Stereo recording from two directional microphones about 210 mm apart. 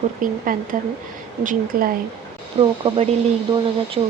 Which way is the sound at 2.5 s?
30° right (ahead or behind).